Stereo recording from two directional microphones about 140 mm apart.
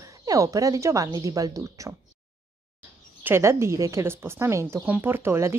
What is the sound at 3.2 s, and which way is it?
A woman's voice, 15° right (ahead or behind).